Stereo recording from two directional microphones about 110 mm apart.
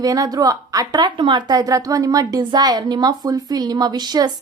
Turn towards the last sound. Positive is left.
turn(degrees=-40)  # may be behind; listen again after turning